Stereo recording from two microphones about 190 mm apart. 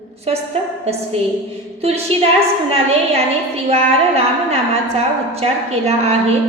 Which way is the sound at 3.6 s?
35° right (ahead or behind).